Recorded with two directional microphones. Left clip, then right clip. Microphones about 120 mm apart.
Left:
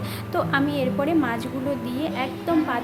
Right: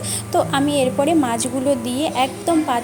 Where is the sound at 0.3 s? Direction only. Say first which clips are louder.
Right 5 dB; 30° right (ahead or behind).